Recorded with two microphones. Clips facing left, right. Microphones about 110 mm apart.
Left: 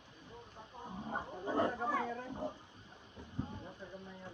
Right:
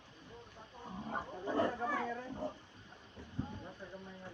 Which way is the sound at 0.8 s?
20° left (ahead or behind).